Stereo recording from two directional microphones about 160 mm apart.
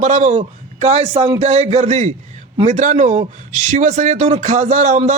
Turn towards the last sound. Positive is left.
turn(degrees=-45)  # may be behind; listen again after turning